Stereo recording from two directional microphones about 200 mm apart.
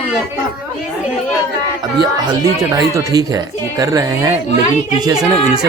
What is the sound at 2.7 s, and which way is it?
Speech, 15° right (ahead or behind).